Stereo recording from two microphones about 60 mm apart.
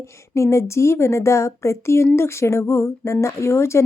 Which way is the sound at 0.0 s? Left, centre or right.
Left.